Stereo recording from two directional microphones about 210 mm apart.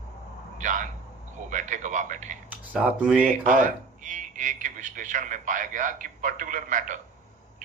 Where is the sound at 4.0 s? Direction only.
35° right (ahead or behind).